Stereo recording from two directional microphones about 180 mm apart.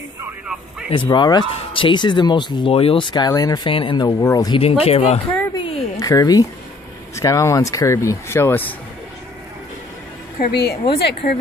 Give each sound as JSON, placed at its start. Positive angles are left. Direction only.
{"t": 0.8, "sound": "speech", "side_deg": 30}
{"t": 4.8, "sound": "speech", "side_deg": 35}
{"t": 5.3, "sound": "a sound", "side_deg": 10}
{"t": 5.9, "sound": "speech", "side_deg": 20}
{"t": 10.4, "sound": "a woman's voice", "side_deg": 60}